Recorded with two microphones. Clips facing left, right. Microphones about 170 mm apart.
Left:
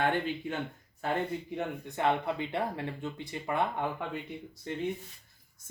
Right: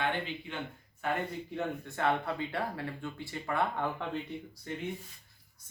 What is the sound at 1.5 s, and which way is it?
Speech, 15° left (ahead or behind).